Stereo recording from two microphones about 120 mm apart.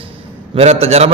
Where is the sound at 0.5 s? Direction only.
60° right (ahead or behind).